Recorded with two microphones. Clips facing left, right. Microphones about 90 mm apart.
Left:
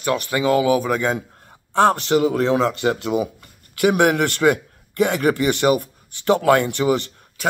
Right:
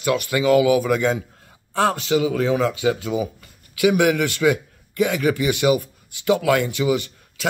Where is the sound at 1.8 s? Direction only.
50° left (ahead or behind).